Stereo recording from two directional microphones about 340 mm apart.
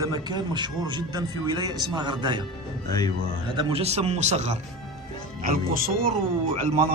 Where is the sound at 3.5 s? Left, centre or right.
Centre.